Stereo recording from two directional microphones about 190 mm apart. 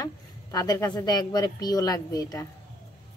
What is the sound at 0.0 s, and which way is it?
Speech, 20° left (ahead or behind).